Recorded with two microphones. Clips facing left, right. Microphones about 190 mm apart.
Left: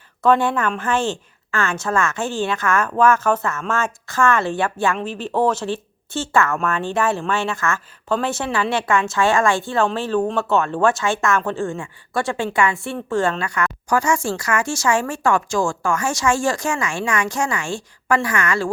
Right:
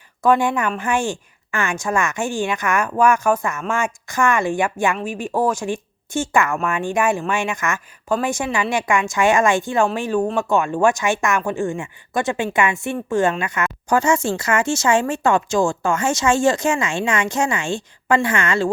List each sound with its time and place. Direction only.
0.2 s speech: 10° right (ahead or behind)